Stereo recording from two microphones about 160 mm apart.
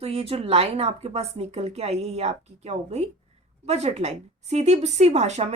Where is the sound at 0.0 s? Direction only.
40° right (ahead or behind).